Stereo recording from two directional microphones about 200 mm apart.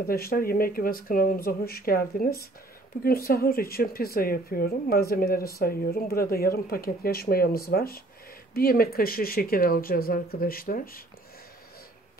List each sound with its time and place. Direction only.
0.0 s speech: 50° left (ahead or behind)